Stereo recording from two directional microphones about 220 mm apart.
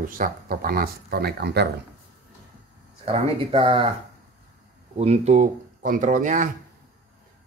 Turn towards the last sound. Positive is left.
turn(degrees=-35)  # may be behind; listen again after turning